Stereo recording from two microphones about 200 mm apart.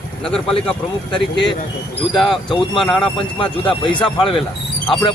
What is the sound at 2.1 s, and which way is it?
Speech, centre (ahead or behind).